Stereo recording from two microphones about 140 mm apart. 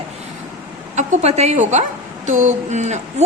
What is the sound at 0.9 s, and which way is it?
A woman's voice, 60° right (ahead or behind).